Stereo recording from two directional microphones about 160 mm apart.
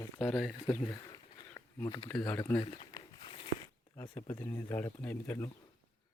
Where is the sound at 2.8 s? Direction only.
30° left (ahead or behind).